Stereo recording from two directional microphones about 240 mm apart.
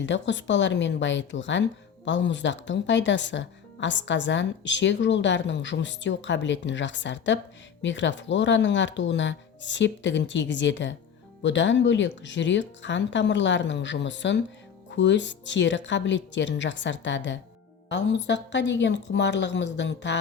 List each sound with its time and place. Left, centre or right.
0.0 s speech: left